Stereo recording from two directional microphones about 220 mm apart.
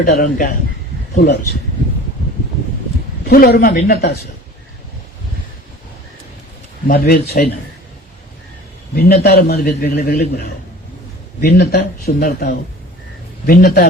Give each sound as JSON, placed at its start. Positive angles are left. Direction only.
{"t": 0.0, "sound": "a man's voice", "side_deg": 40}
{"t": 3.2, "sound": "a man's voice", "side_deg": 45}
{"t": 6.8, "sound": "a man's voice", "side_deg": 45}
{"t": 9.0, "sound": "a man's voice", "side_deg": 45}